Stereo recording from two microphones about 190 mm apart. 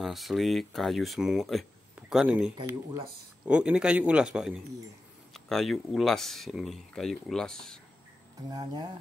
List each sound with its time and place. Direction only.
0.0 s speech: centre (ahead or behind)
8.5 s speech: 20° right (ahead or behind)